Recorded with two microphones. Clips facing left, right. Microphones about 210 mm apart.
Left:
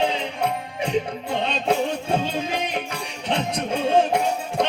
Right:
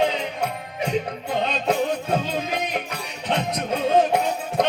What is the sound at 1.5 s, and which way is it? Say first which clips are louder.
Music: left 1 dB; 30° left (ahead or behind).